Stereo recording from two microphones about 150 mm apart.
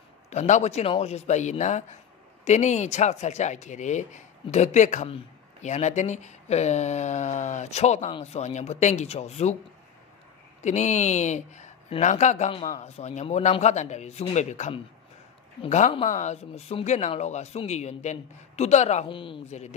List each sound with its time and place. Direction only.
0.3 s speech: 50° left (ahead or behind)
10.6 s speech: 50° left (ahead or behind)
15.6 s speech: 35° left (ahead or behind)
16.1 s speech: 50° left (ahead or behind)
19.0 s speech: 35° left (ahead or behind)